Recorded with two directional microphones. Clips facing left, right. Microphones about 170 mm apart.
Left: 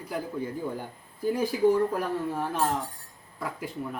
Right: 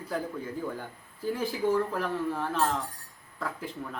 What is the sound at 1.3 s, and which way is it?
Speech, 15° left (ahead or behind).